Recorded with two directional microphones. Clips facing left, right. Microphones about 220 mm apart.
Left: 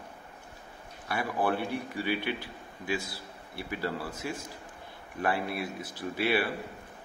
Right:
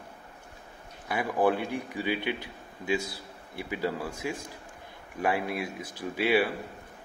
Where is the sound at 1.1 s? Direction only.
15° right (ahead or behind).